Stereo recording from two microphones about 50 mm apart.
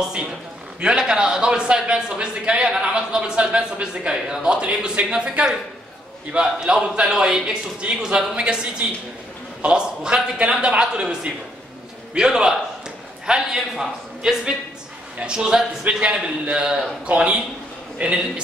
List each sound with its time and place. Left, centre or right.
0.7 s a man's voice: centre